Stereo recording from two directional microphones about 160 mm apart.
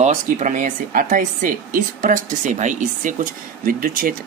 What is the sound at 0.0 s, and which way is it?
Speech, 45° right (ahead or behind).